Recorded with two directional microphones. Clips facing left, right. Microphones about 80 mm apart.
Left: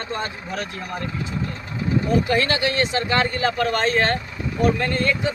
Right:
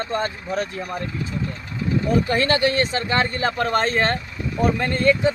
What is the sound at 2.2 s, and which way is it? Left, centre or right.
Speech, right.